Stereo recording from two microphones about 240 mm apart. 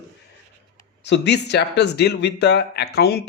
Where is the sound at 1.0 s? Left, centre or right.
Left.